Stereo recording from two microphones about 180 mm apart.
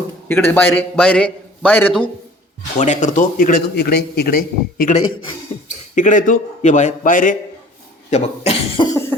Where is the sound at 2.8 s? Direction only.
45° left (ahead or behind).